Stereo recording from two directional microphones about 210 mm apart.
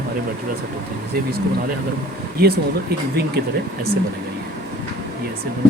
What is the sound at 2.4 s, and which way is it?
Speech, 50° right (ahead or behind).